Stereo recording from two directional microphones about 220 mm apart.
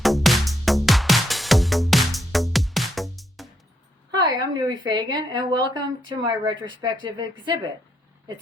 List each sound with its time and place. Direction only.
0.0 s music: centre (ahead or behind)
4.1 s a woman's voice: 15° right (ahead or behind)